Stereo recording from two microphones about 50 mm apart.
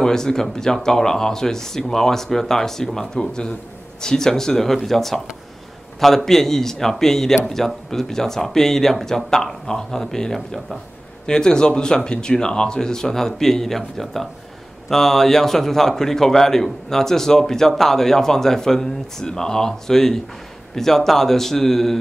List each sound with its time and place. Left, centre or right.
0.0 s a man's voice: centre